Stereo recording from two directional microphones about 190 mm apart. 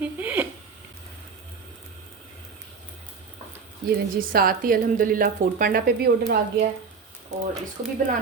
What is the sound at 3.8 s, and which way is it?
Speech, 50° right (ahead or behind).